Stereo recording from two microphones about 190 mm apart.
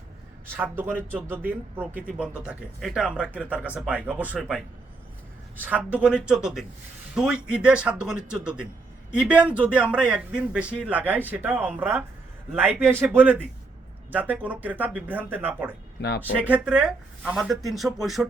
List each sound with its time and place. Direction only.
0.4 s a man's voice: 10° right (ahead or behind)
16.0 s speech: 60° left (ahead or behind)
16.4 s speech: 5° right (ahead or behind)